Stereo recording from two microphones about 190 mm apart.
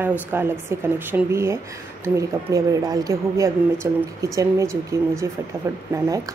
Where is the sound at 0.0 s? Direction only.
10° right (ahead or behind).